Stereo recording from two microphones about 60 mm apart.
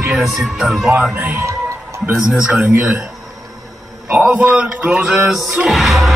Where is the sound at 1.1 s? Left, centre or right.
Right.